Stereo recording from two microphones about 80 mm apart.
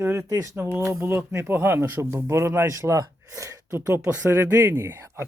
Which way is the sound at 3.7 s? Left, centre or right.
Right.